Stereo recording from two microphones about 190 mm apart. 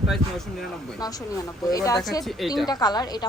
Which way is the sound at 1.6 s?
20° left (ahead or behind).